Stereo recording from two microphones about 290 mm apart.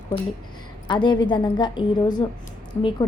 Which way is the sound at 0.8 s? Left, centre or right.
Centre.